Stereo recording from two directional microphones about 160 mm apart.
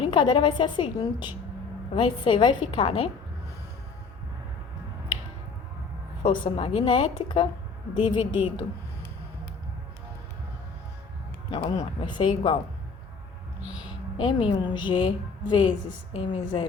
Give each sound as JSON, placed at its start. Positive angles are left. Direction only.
{"t": 0.0, "sound": "a woman's voice", "side_deg": 30}
{"t": 6.2, "sound": "a woman's voice", "side_deg": 30}
{"t": 11.5, "sound": "a woman's voice", "side_deg": 30}
{"t": 14.2, "sound": "a woman's voice", "side_deg": 30}